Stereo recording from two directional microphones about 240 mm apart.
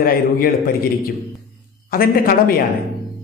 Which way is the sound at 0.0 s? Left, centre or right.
Left.